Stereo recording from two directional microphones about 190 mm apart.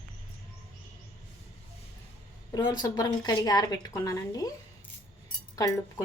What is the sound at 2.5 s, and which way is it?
A woman's voice, 20° left (ahead or behind).